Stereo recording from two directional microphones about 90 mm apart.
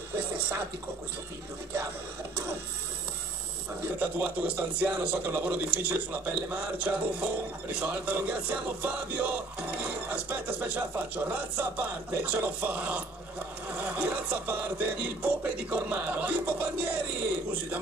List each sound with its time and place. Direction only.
4.0 s a man's voice: 20° right (ahead or behind)